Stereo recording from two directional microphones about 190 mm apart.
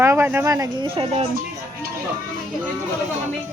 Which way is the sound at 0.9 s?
30° right (ahead or behind).